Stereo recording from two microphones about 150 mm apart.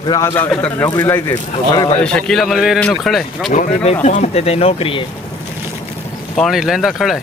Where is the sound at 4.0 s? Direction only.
50° left (ahead or behind).